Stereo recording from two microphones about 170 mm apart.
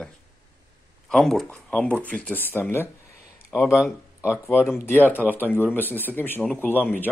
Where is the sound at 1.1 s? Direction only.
5° left (ahead or behind).